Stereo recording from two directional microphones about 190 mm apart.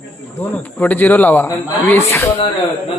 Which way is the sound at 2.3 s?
30° left (ahead or behind).